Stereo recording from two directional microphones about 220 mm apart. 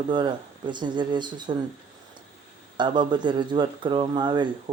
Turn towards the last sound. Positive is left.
turn(degrees=-20)  # may be behind; listen again after turning